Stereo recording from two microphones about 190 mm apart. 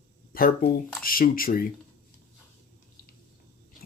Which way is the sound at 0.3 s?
50° left (ahead or behind).